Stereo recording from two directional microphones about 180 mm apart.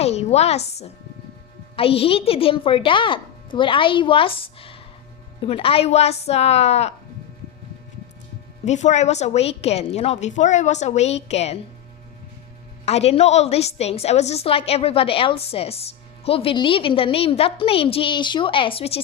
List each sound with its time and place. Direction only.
0.0 s a woman's voice: 35° left (ahead or behind)
8.6 s a woman's voice: 40° left (ahead or behind)
12.8 s a woman's voice: 35° left (ahead or behind)